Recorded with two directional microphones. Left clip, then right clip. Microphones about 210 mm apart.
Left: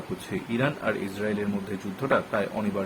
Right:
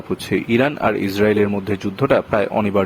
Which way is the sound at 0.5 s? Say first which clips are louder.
Right 9 dB; 50° right (ahead or behind).